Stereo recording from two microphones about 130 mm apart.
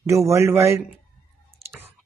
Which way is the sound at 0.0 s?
20° right (ahead or behind).